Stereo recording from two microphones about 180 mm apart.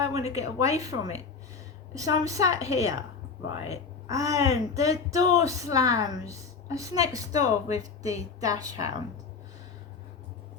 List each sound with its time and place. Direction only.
0.0 s a woman's voice: 20° right (ahead or behind)